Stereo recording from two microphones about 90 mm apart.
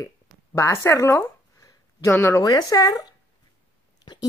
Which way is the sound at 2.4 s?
45° left (ahead or behind).